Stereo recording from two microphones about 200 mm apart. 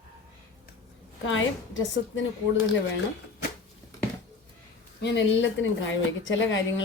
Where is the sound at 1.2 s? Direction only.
75° left (ahead or behind).